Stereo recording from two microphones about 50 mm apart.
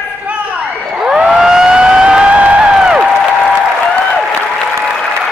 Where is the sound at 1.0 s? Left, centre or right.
Centre.